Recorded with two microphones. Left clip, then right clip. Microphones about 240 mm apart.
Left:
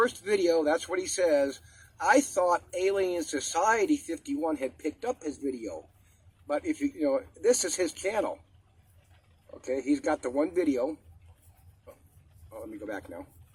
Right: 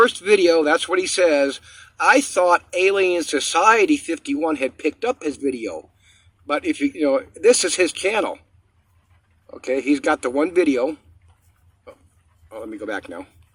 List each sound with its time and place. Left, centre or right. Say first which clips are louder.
0.0 s speech: right 11 dB; right
6.5 s speech: right 9 dB; right
9.5 s speech: right 9 dB; right
12.5 s speech: right 10 dB; right